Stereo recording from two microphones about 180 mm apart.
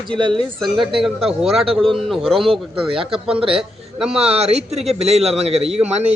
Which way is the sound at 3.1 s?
5° right (ahead or behind).